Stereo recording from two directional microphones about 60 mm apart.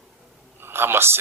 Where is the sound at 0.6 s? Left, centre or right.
Right.